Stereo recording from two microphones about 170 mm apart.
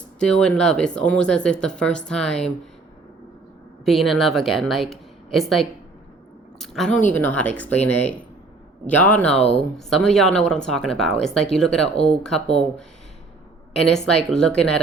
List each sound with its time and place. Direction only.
0.2 s speech: 5° left (ahead or behind)
3.8 s speech: centre (ahead or behind)
9.3 s speech: 35° left (ahead or behind)
9.7 s speech: centre (ahead or behind)
13.7 s speech: 5° left (ahead or behind)